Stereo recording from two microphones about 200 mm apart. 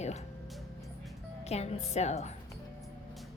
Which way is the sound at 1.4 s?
30° left (ahead or behind).